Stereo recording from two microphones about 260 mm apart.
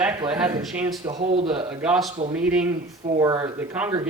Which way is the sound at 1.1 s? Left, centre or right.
Right.